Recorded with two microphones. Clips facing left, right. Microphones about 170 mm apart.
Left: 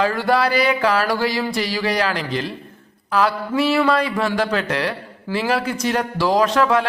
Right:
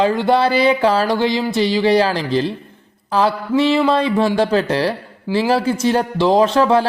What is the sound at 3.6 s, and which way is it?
Speech, 20° right (ahead or behind).